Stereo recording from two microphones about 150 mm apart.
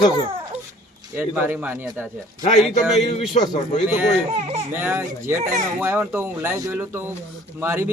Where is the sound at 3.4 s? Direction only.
50° left (ahead or behind).